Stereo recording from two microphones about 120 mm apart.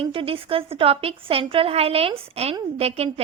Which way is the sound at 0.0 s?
50° right (ahead or behind).